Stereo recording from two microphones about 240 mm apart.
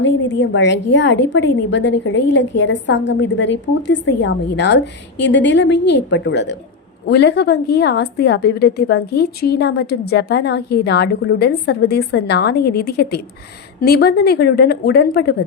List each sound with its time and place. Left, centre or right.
0.0 s a woman's voice: left